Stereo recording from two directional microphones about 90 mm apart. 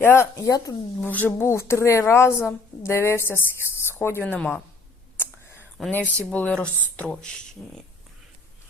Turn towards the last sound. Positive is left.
turn(degrees=10)  # may be behind; listen again after turning